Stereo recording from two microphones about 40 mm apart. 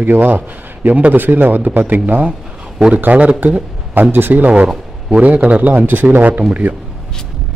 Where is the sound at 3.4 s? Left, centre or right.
Right.